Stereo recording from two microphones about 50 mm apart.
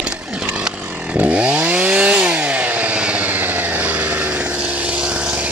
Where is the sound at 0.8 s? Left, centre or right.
Right.